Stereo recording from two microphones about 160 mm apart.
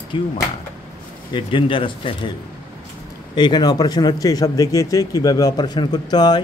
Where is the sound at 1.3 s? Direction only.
30° left (ahead or behind).